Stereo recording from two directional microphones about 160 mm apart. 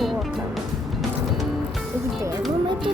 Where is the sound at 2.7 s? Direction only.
30° right (ahead or behind).